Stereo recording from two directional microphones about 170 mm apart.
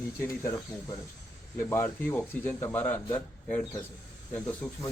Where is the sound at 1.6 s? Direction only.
15° left (ahead or behind).